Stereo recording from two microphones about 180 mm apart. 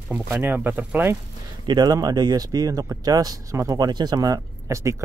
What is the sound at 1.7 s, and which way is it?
Speech, 20° right (ahead or behind).